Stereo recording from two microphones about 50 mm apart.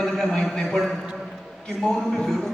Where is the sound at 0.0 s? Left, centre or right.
Centre.